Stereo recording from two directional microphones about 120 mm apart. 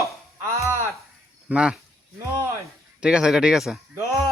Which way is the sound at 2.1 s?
20° right (ahead or behind).